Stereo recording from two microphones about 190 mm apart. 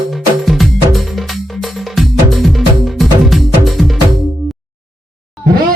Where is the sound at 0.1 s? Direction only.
Centre (ahead or behind).